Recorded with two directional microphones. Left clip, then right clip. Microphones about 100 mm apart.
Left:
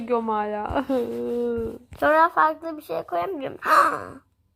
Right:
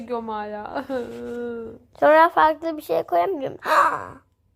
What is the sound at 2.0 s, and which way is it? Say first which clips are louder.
A woman's voice: right 3 dB; 25° right (ahead or behind).